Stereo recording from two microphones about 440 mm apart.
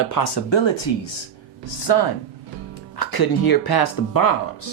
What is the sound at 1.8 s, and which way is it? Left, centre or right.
Speech, left.